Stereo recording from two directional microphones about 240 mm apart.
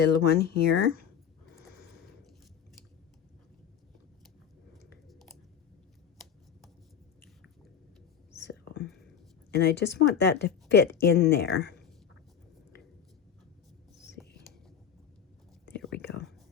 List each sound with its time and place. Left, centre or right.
0.0 s speech: left
4.7 s chewing: centre
8.3 s whispering: left
9.5 s a woman's voice: left
16.0 s whispering: left